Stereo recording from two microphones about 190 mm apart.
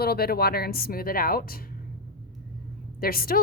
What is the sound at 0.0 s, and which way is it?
A woman's voice, 55° left (ahead or behind).